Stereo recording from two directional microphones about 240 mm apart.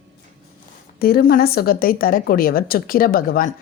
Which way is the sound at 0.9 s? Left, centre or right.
Left.